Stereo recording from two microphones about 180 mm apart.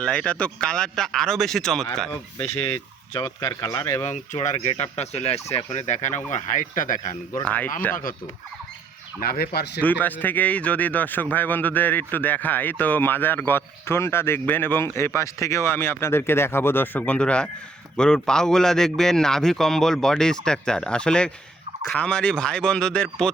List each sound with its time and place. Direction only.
0.0 s a man's voice: 5° left (ahead or behind)
2.4 s speech: 15° left (ahead or behind)
4.4 s speech: 35° left (ahead or behind)
7.4 s speech: 10° left (ahead or behind)
9.2 s speech: 60° left (ahead or behind)
9.8 s a man's voice: 10° left (ahead or behind)